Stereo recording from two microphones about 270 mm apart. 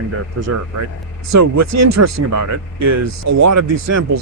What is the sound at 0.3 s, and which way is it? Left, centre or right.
Speech, right.